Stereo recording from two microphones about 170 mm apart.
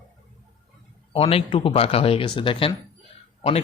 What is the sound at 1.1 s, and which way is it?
Speech, 35° left (ahead or behind).